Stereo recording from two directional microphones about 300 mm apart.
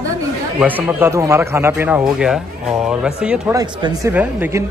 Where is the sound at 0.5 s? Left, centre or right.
Centre.